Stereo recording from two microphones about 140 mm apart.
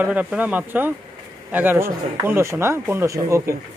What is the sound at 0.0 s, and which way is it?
Speech, 10° right (ahead or behind).